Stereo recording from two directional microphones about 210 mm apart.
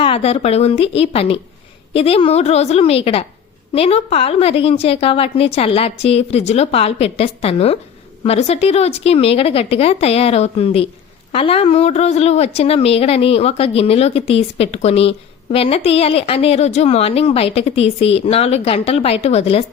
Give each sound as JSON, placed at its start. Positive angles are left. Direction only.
{"t": 0.0, "sound": "a woman's voice", "side_deg": 30}